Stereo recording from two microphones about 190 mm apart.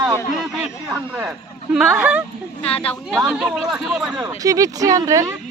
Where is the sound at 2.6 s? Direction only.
30° left (ahead or behind).